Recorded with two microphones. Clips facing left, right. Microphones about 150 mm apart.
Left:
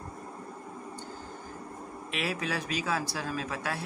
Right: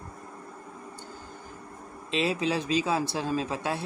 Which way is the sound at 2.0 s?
25° right (ahead or behind).